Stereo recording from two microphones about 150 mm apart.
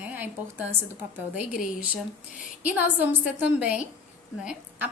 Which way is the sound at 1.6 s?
5° right (ahead or behind).